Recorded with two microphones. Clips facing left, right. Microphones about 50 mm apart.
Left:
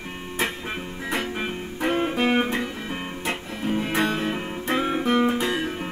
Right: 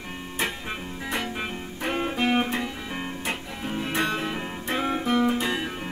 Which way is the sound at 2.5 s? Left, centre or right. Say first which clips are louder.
Left 2 dB; centre.